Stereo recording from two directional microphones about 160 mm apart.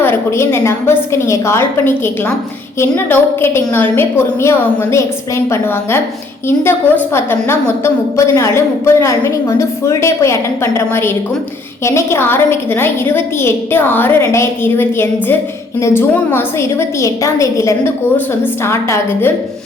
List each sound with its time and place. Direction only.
0.0 s a woman's voice: 15° left (ahead or behind)